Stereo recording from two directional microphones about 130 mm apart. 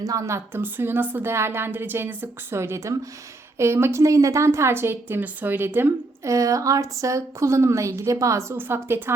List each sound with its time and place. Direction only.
0.0 s a woman's voice: 25° right (ahead or behind)